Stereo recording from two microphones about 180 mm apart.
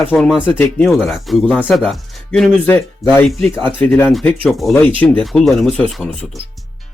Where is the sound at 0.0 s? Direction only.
10° left (ahead or behind).